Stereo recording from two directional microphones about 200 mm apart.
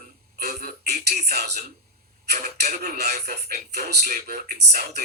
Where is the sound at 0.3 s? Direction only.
50° right (ahead or behind).